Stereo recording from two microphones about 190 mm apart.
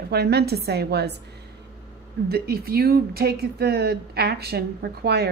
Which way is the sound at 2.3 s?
55° right (ahead or behind).